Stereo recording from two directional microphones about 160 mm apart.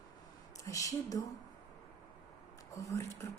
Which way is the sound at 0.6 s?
20° left (ahead or behind).